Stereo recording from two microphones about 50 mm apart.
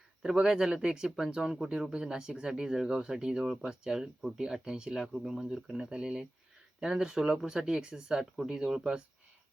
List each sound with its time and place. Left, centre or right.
0.4 s speech: centre
5.5 s speech: centre